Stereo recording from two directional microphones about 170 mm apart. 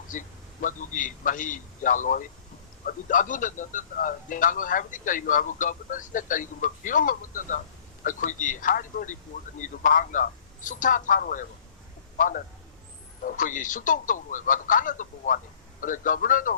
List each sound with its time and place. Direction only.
0.1 s a man's voice: 50° left (ahead or behind)